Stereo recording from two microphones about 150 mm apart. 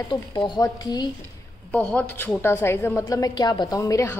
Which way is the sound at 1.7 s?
5° left (ahead or behind).